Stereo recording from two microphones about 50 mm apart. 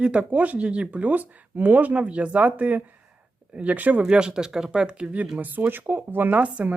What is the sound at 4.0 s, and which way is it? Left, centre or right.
Speech, centre.